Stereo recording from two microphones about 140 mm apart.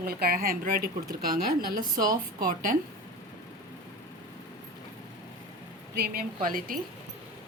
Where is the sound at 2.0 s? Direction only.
90° right.